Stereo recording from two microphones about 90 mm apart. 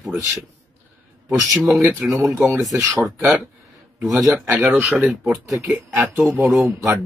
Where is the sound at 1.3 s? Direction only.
Centre (ahead or behind).